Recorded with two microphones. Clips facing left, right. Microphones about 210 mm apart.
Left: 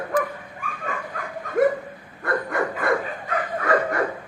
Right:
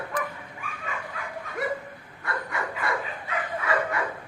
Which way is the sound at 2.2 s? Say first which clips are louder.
Left 8 dB; 50° left (ahead or behind).